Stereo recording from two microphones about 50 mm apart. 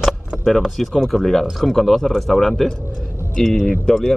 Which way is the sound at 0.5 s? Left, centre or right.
Centre.